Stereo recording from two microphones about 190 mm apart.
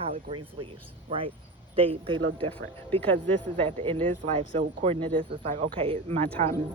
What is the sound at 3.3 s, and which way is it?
Speech, 30° right (ahead or behind).